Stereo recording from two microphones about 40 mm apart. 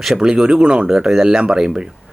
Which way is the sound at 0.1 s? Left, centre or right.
Centre.